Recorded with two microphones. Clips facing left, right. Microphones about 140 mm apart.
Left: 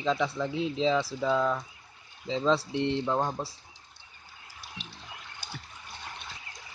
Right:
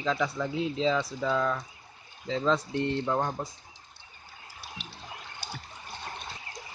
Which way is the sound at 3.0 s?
5° left (ahead or behind).